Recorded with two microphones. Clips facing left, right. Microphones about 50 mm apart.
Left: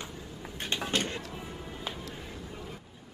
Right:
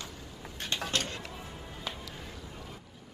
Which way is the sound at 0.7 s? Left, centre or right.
Centre.